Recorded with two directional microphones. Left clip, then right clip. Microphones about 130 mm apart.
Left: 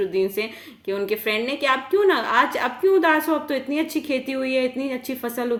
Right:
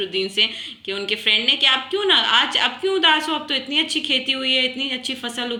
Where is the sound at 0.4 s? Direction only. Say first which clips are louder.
Right 6 dB; 45° left (ahead or behind).